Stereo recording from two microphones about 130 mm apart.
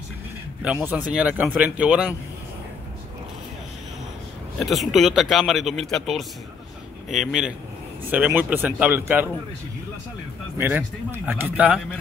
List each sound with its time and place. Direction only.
0.6 s speech: 10° right (ahead or behind)
4.6 s speech: centre (ahead or behind); by 9.3 s 15° right (ahead or behind)
10.6 s speech: 15° right (ahead or behind)